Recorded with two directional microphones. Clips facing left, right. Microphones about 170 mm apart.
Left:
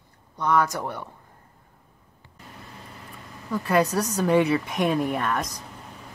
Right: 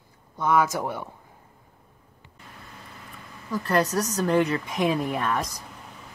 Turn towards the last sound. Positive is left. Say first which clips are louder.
# left 1 dB
turn(degrees=0)  # may be behind; listen again after turning